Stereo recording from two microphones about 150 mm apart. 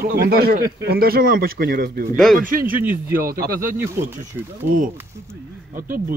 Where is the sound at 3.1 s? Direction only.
85° right.